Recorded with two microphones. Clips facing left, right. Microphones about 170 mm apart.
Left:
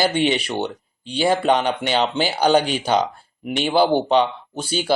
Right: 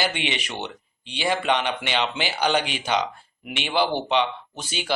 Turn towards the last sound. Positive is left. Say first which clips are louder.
# left 8 dB
turn(degrees=35)  # may be behind; listen again after turning